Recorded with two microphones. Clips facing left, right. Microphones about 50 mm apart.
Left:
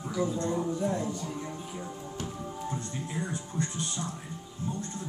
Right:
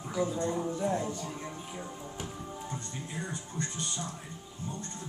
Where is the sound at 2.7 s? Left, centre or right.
Centre.